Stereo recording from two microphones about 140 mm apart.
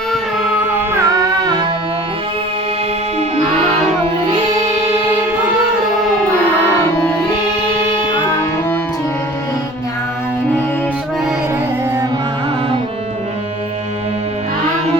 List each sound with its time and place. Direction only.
0.1 s music: 5° right (ahead or behind)
0.7 s carnatic music: 15° right (ahead or behind)